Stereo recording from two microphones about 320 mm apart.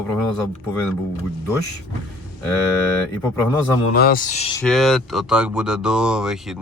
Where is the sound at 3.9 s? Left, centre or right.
Left.